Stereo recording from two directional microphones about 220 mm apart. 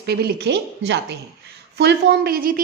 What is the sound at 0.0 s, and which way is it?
Speech, 45° right (ahead or behind).